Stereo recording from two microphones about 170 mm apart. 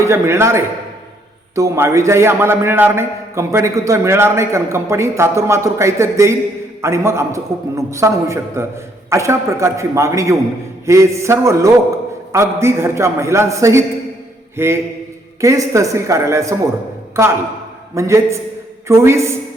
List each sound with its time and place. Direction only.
0.0 s a man's voice: 15° right (ahead or behind)
14.5 s a sound: 15° right (ahead or behind)
15.4 s a man's voice: 20° right (ahead or behind)